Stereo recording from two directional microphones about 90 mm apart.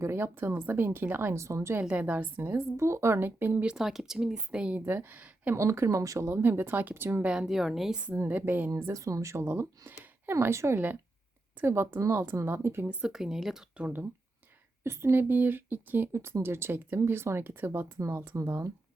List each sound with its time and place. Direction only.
0.0 s speech: 30° right (ahead or behind)
1.8 s speech: 15° right (ahead or behind)
3.7 s speech: 5° right (ahead or behind)
4.9 s speech: 20° right (ahead or behind)
5.5 s speech: 30° right (ahead or behind)
7.3 s a woman's voice: 5° right (ahead or behind)
8.2 s speech: 20° right (ahead or behind)
8.9 s speech: 35° right (ahead or behind)
12.9 s speech: 10° right (ahead or behind); by 18.7 s 30° right (ahead or behind)